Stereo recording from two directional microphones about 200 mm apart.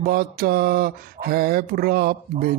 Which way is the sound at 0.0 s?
50° right (ahead or behind).